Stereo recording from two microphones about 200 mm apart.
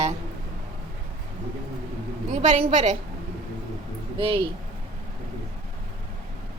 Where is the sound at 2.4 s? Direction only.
35° right (ahead or behind).